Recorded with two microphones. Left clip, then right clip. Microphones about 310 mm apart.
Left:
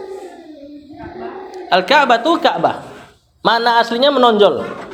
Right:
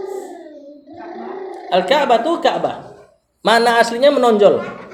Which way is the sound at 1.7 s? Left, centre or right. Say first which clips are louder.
Left 2 dB; left.